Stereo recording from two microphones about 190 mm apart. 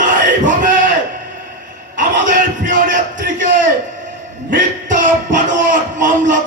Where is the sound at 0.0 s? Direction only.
40° right (ahead or behind).